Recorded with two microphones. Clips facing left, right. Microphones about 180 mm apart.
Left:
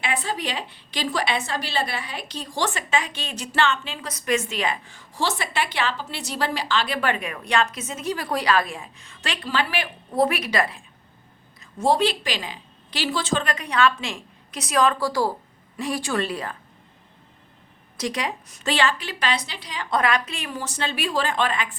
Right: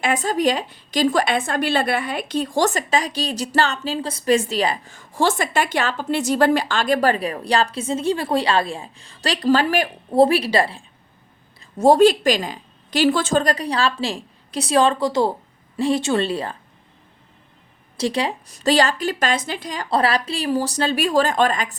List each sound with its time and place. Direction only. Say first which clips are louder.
0.0 s a woman's voice: right 8 dB; 45° right (ahead or behind)
10.1 s a woman's voice: right 7 dB; 30° right (ahead or behind)
11.8 s a woman's voice: right 8 dB; 45° right (ahead or behind); by 16.6 s 30° right (ahead or behind)
17.9 s a woman's voice: right 5 dB; 30° right (ahead or behind); by 19.9 s 45° right (ahead or behind)
19.9 s a woman's voice: right 3 dB; 35° right (ahead or behind)